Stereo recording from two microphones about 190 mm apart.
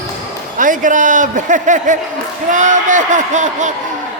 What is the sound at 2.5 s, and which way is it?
Speech, 40° right (ahead or behind).